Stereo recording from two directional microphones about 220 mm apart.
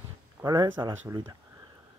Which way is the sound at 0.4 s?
15° right (ahead or behind).